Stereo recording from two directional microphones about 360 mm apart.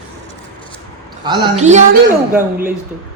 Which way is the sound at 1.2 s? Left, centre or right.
Centre.